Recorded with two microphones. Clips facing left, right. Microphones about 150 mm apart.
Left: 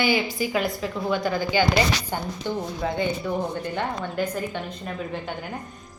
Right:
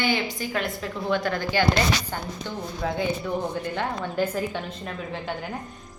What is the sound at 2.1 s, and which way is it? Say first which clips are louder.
Speech: left 3 dB; 15° left (ahead or behind).